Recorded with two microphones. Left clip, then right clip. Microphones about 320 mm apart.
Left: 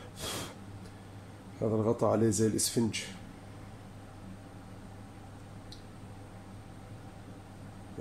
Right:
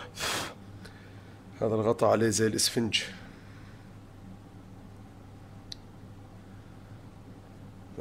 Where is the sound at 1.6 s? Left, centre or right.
Right.